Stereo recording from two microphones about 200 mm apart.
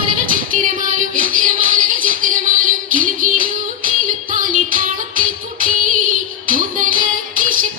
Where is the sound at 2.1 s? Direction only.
40° right (ahead or behind).